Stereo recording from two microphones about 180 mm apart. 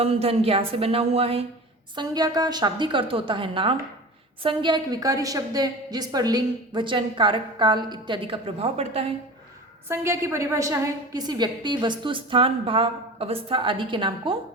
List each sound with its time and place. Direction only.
0.0 s speech: 35° right (ahead or behind)
2.0 s a woman's voice: 20° right (ahead or behind)
9.9 s a woman's voice: 15° right (ahead or behind)